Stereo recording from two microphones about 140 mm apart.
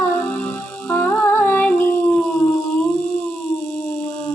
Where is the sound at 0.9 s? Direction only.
15° left (ahead or behind).